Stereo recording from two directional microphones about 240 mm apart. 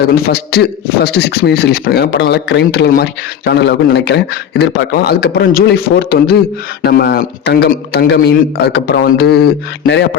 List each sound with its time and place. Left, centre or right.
0.1 s a man's voice: left